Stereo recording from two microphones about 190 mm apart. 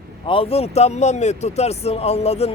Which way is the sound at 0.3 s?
30° left (ahead or behind).